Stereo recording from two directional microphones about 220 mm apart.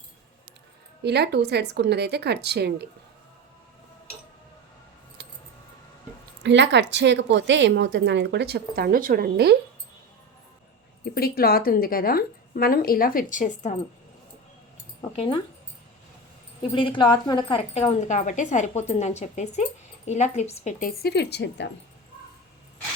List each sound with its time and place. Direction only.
1.0 s speech: 50° right (ahead or behind)
5.2 s keys jangling: 50° right (ahead or behind)
6.4 s speech: 55° right (ahead or behind)
11.0 s a woman's voice: 45° left (ahead or behind)
15.1 s speech: 25° left (ahead or behind)
16.7 s a woman's voice: 20° left (ahead or behind); by 21.7 s 50° left (ahead or behind)